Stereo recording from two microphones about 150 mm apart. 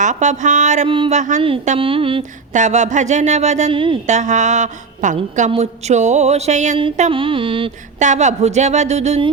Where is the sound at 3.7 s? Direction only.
35° right (ahead or behind).